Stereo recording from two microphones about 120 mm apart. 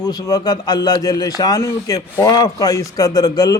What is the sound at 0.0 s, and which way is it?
Speech, 35° left (ahead or behind).